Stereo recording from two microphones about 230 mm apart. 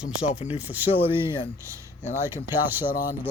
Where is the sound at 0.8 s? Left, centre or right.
Centre.